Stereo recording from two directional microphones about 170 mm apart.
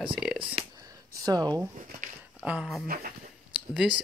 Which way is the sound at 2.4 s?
5° right (ahead or behind).